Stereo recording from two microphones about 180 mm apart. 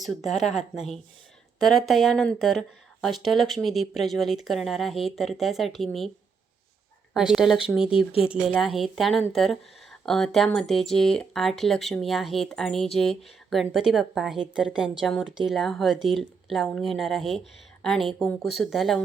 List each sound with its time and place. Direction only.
0.0 s speech: centre (ahead or behind)
1.5 s speech: centre (ahead or behind)
7.1 s speech: centre (ahead or behind)
7.9 s speech: 30° left (ahead or behind)
8.5 s speech: centre (ahead or behind)